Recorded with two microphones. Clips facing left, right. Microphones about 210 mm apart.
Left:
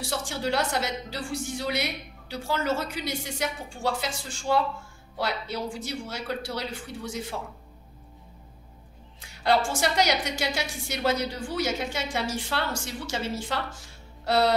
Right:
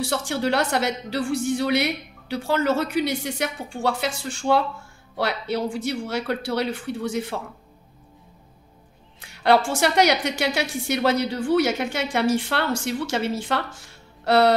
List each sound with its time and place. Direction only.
0.0 s a woman's voice: 65° right (ahead or behind)
9.2 s a sound: 65° right (ahead or behind)
9.7 s a woman's voice: 65° right (ahead or behind)